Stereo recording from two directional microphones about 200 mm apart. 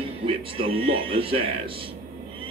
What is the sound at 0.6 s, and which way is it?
Speech, 50° right (ahead or behind).